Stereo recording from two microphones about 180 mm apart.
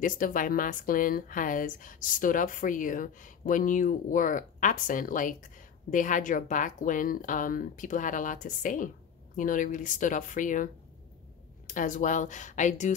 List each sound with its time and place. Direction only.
0.0 s a woman's voice: 50° left (ahead or behind)